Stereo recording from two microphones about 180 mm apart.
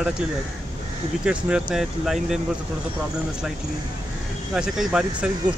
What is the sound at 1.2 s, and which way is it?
Speech, 5° right (ahead or behind).